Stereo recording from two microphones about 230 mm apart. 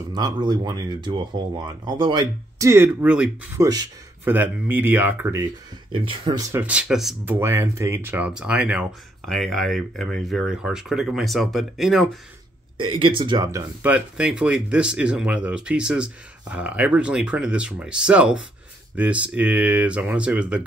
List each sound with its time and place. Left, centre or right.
0.1 s speech: centre
6.6 s speech: centre
12.7 s speech: right
13.8 s speech: centre